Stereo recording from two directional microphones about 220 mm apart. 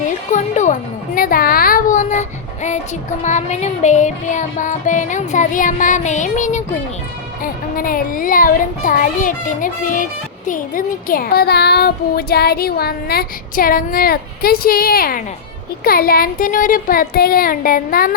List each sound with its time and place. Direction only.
0.3 s music: 35° left (ahead or behind)
3.2 s speech: 30° left (ahead or behind)